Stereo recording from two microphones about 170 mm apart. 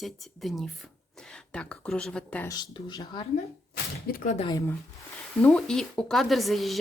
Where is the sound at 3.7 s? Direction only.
60° left (ahead or behind).